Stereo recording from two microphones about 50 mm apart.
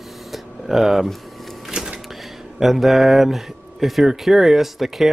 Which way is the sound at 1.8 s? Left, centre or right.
Centre.